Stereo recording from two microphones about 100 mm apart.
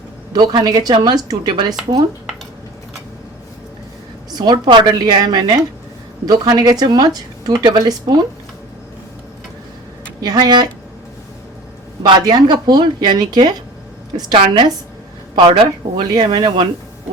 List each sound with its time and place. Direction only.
0.3 s a woman's voice: 45° right (ahead or behind)
4.3 s a woman's voice: 45° right (ahead or behind)
10.2 s a woman's voice: 40° right (ahead or behind)
12.0 s a woman's voice: 45° right (ahead or behind)
16.0 s a woman's voice: 45° right (ahead or behind)